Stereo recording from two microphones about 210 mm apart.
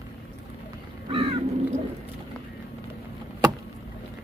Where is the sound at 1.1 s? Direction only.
25° right (ahead or behind).